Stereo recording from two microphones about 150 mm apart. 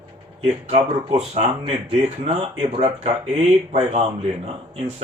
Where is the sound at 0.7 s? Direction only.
40° right (ahead or behind).